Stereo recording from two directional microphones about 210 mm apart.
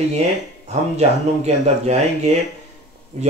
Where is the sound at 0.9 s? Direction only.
30° right (ahead or behind).